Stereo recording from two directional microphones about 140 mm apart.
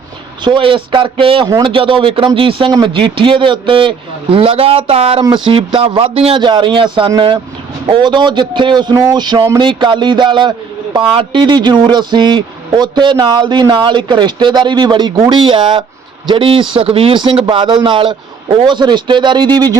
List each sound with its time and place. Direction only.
0.4 s speech: 35° right (ahead or behind)